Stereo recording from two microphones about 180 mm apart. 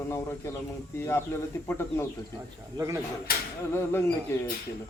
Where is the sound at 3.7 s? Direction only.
15° left (ahead or behind).